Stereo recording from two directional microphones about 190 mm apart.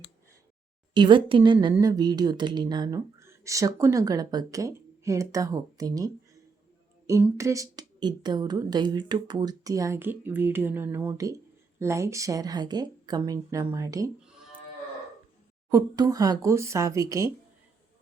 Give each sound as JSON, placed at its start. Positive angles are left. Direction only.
{"t": 0.9, "sound": "speech", "side_deg": -25}
{"t": 7.1, "sound": "a woman's voice", "side_deg": -15}
{"t": 15.7, "sound": "a woman's voice", "side_deg": -20}